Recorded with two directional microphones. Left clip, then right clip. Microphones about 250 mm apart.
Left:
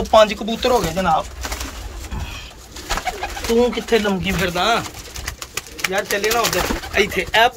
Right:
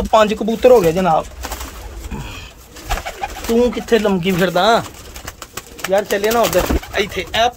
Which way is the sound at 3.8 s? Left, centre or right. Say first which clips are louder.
Right 3 dB; right.